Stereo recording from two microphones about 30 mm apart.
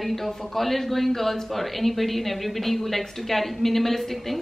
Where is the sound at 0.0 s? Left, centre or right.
Centre.